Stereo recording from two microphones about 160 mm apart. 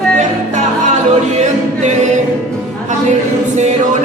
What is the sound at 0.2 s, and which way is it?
Music, 50° right (ahead or behind).